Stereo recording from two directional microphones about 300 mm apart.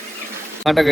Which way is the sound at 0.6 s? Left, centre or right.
Centre.